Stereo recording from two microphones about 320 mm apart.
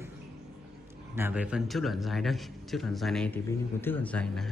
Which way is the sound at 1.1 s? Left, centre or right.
Centre.